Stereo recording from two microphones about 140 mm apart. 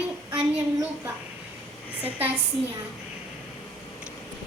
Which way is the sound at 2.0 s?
10° right (ahead or behind).